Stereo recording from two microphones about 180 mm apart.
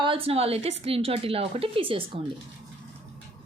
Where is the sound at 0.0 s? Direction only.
30° right (ahead or behind).